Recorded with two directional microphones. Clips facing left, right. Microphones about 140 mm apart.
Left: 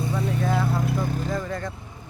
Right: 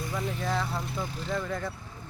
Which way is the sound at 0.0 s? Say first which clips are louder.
Left 6 dB; 30° left (ahead or behind).